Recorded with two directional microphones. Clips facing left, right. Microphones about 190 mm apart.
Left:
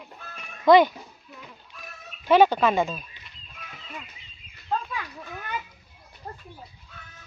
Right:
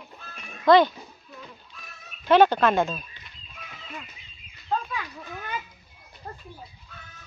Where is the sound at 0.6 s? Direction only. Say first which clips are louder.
Left 1 dB; 10° left (ahead or behind).